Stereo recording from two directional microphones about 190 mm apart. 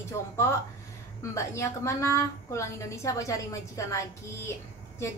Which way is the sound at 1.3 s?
15° left (ahead or behind).